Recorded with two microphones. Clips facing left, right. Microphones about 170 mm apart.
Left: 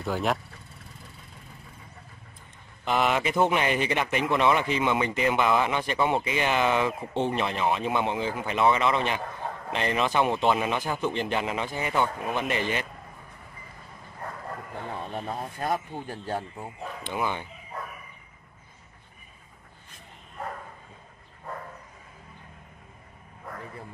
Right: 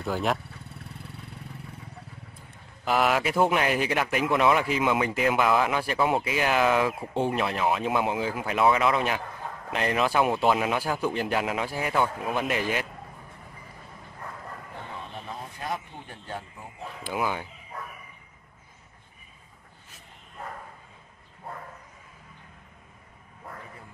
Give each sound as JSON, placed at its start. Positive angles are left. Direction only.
{"t": 0.0, "sound": "vehicle", "side_deg": 0}
{"t": 2.8, "sound": "speech", "side_deg": -5}
{"t": 15.1, "sound": "a sound", "side_deg": 50}
{"t": 16.1, "sound": "speech", "side_deg": 40}
{"t": 17.0, "sound": "speech", "side_deg": -5}